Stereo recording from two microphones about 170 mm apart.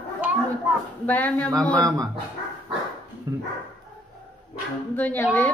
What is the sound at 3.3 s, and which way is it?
Speech, 20° right (ahead or behind).